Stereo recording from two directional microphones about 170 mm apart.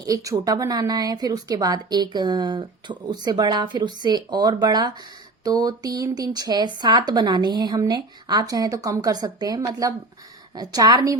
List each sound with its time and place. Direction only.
0.0 s a woman's voice: 20° right (ahead or behind)